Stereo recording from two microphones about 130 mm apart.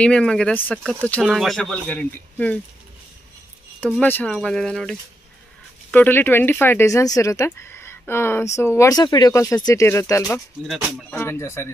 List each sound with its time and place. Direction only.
0.0 s speech: 5° left (ahead or behind)
4.0 s speech: 10° left (ahead or behind)
5.9 s speech: 15° left (ahead or behind)